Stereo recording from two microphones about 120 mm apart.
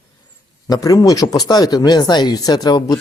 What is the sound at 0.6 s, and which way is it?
Speech, 30° left (ahead or behind).